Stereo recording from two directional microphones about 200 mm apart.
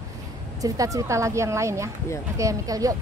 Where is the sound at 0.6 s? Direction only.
15° right (ahead or behind).